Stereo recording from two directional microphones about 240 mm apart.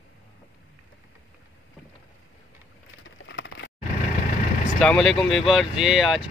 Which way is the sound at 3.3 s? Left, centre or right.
Left.